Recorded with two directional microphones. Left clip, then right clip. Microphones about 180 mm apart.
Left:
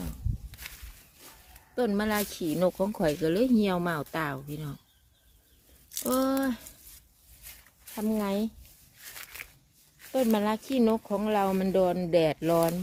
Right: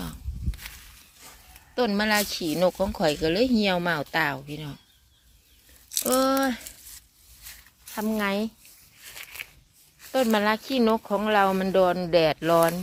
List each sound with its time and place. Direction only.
1.7 s speech: 5° left (ahead or behind)
6.0 s speech: 5° left (ahead or behind)
7.9 s speech: 5° right (ahead or behind)
10.3 s speech: 5° left (ahead or behind)